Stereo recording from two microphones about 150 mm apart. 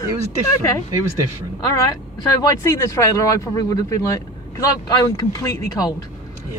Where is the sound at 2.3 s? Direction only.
20° left (ahead or behind).